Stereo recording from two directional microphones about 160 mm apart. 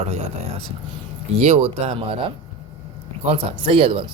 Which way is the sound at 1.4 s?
40° right (ahead or behind).